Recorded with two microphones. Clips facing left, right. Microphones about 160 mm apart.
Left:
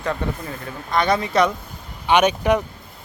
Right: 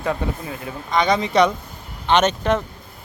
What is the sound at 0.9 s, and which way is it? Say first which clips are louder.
Speech: right 1 dB; centre (ahead or behind).